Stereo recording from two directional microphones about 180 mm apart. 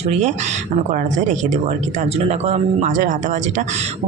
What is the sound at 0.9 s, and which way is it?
A man's voice, 40° right (ahead or behind).